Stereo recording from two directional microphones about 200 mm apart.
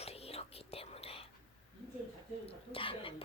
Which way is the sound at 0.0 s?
30° left (ahead or behind).